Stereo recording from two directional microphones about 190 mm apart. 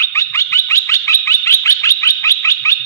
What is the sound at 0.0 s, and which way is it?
Bird, 15° left (ahead or behind).